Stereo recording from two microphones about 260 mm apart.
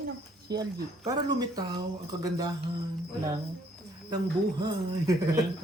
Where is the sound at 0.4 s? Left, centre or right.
Centre.